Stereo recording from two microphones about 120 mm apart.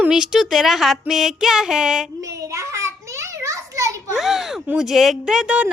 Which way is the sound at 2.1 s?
25° right (ahead or behind).